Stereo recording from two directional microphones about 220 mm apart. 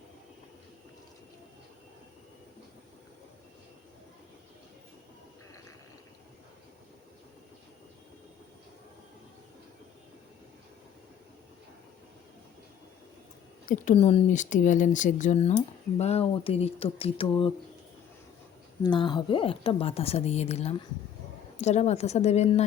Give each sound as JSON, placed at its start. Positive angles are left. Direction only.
{"t": 13.7, "sound": "speech", "side_deg": 30}
{"t": 18.8, "sound": "speech", "side_deg": 20}